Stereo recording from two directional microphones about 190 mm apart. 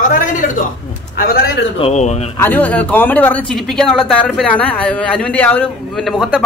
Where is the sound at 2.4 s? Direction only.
10° left (ahead or behind).